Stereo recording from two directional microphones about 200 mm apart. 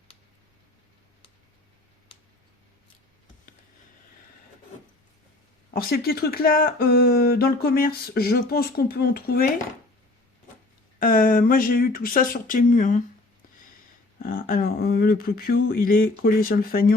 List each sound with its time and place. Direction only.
5.7 s speech: 50° left (ahead or behind)
11.0 s speech: 45° left (ahead or behind)
14.2 s speech: 45° left (ahead or behind)